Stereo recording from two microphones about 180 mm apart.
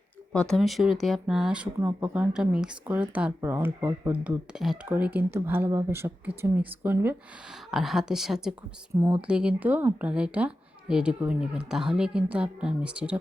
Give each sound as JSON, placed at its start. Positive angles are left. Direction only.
{"t": 0.3, "sound": "a woman's voice", "side_deg": 0}
{"t": 9.0, "sound": "speech", "side_deg": -15}
{"t": 9.2, "sound": "a woman's voice", "side_deg": -5}